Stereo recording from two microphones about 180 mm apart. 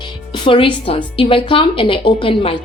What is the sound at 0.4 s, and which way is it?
A woman's voice, 30° left (ahead or behind).